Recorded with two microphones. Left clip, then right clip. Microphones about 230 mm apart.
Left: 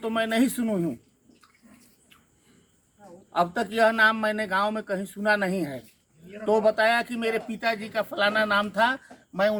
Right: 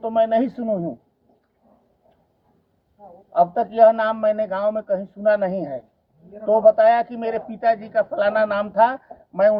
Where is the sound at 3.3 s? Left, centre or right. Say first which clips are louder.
Right 7 dB; centre.